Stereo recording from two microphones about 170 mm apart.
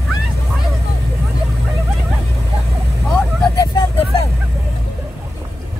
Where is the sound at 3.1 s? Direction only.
25° left (ahead or behind).